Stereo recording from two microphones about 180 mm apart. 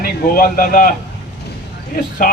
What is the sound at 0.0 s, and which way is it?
Speech, 55° left (ahead or behind).